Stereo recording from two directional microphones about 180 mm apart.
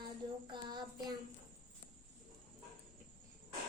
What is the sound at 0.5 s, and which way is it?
Child singing, 25° right (ahead or behind).